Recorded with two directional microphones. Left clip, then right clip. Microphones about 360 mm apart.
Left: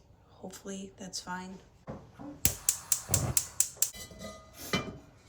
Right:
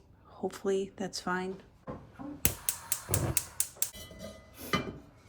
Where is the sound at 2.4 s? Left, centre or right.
Centre.